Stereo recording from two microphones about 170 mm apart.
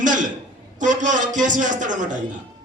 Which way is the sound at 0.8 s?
45° right (ahead or behind).